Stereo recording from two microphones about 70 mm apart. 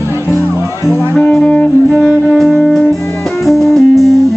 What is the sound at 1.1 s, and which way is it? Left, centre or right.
Music, centre.